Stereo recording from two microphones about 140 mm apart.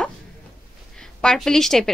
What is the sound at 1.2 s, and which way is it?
Speech, 5° left (ahead or behind).